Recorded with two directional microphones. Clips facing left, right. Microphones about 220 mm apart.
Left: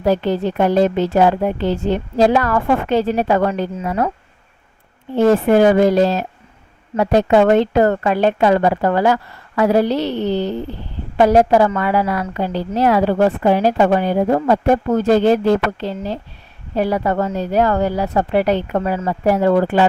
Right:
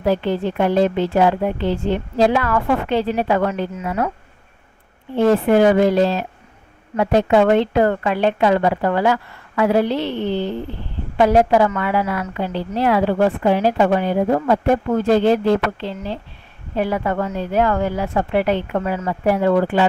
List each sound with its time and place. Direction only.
0.0 s a woman's voice: 40° left (ahead or behind)
5.1 s a woman's voice: 40° left (ahead or behind)